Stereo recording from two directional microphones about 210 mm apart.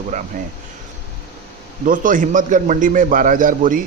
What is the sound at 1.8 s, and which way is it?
A man's voice, 40° right (ahead or behind).